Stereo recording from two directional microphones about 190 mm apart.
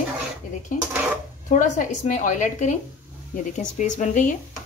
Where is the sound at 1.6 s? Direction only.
40° left (ahead or behind).